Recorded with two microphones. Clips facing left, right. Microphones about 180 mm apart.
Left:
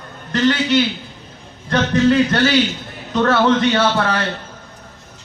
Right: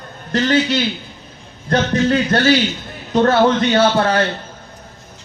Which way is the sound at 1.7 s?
45° right (ahead or behind).